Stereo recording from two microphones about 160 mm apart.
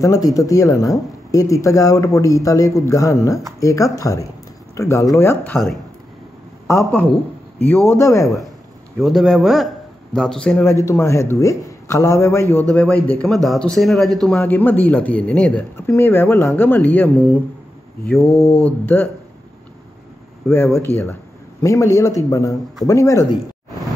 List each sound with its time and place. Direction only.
0.0 s a man's voice: 20° left (ahead or behind)
6.7 s a man's voice: 15° left (ahead or behind)
9.0 s a man's voice: centre (ahead or behind)
18.3 s mantra: 40° left (ahead or behind)
18.6 s a man's voice: 10° left (ahead or behind)
20.4 s a man's voice: 15° left (ahead or behind)